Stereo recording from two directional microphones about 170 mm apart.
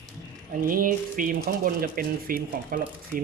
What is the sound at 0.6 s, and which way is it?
Speech, 55° right (ahead or behind).